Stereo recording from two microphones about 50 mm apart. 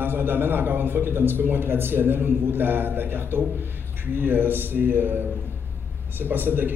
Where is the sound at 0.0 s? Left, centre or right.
Right.